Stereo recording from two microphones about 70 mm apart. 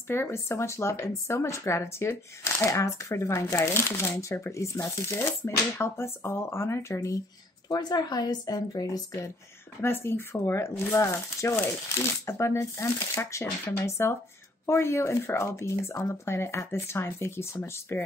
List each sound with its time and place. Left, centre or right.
0.1 s speech: left
7.6 s a woman's voice: left
9.8 s speech: left